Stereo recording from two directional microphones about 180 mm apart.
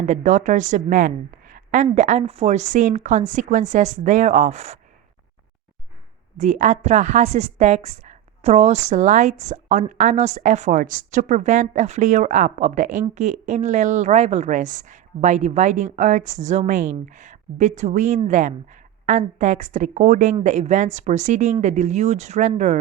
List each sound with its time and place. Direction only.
0.0 s a woman's voice: 45° right (ahead or behind)
6.3 s a woman's voice: 40° right (ahead or behind)